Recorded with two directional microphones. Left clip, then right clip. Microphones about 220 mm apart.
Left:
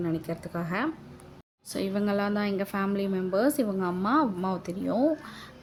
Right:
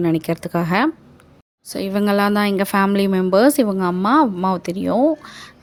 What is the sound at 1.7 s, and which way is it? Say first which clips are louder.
Speech: right 7 dB; 25° right (ahead or behind).